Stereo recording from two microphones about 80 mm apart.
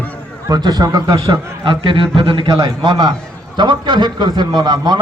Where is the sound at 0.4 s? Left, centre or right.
Right.